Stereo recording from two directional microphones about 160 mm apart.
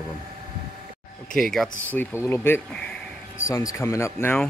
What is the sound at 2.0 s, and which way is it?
Speech, 15° left (ahead or behind).